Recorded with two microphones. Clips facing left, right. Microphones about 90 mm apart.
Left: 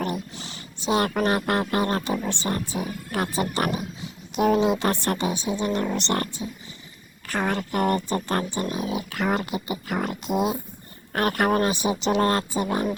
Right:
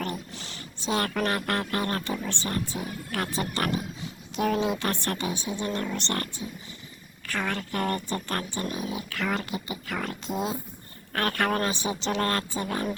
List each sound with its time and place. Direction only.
0.0 s speech: 15° left (ahead or behind)